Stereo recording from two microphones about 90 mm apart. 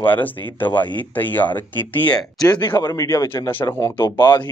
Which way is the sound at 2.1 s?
45° left (ahead or behind).